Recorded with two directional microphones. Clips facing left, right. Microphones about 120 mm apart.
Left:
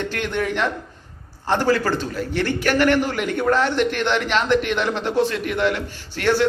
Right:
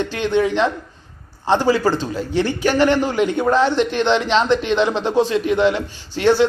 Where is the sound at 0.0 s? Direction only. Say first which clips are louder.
Right 6 dB; 20° right (ahead or behind).